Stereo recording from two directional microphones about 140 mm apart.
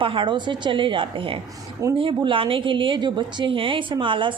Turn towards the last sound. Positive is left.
turn(degrees=-35)  # may be behind; listen again after turning